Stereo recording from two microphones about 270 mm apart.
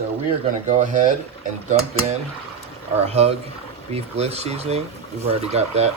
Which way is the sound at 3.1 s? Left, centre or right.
Right.